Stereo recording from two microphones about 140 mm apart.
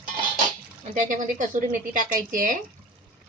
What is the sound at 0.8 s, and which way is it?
A woman's voice, 65° right (ahead or behind).